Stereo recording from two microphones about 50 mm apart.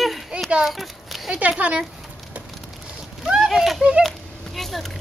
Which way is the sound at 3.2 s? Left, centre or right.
Centre.